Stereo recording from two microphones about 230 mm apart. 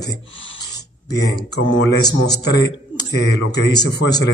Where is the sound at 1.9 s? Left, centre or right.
Centre.